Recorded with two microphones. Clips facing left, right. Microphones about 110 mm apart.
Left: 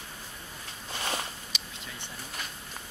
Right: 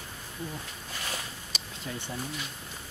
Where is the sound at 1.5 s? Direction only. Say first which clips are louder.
Right 1 dB; 40° right (ahead or behind).